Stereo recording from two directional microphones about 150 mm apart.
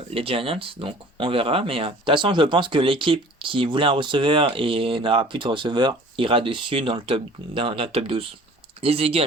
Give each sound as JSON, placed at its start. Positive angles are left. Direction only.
{"t": 0.1, "sound": "speech", "side_deg": -40}